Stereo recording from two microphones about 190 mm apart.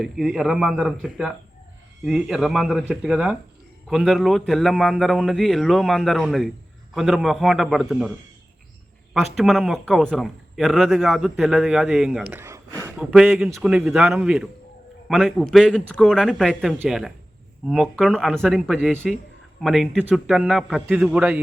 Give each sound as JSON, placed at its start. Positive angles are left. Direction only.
{"t": 0.0, "sound": "a man's voice", "side_deg": 0}
{"t": 9.1, "sound": "a man's voice", "side_deg": 0}